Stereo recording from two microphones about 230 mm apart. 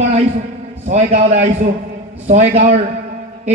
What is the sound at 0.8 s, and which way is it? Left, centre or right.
A man's voice, right.